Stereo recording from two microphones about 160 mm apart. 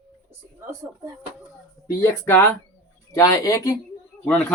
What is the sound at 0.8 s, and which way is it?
Speech, 15° right (ahead or behind).